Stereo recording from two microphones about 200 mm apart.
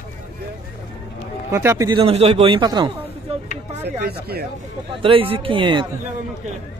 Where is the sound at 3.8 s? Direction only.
55° right (ahead or behind).